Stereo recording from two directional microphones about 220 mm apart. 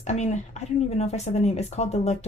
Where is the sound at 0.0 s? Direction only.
30° left (ahead or behind).